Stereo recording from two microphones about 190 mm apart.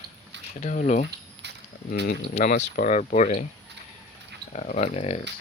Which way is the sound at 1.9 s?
60° left (ahead or behind).